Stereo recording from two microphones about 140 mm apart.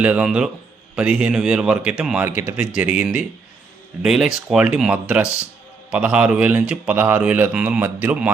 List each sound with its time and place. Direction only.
0.0 s speech: 10° right (ahead or behind)